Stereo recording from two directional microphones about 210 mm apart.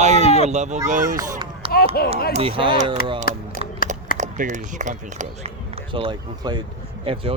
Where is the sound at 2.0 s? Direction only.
45° left (ahead or behind).